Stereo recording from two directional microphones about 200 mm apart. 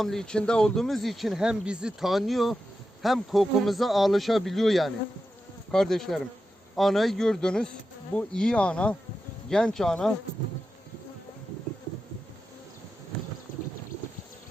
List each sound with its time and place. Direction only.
0.0 s speech: centre (ahead or behind)